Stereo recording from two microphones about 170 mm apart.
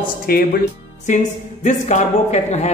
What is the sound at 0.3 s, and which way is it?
Speech, 60° left (ahead or behind).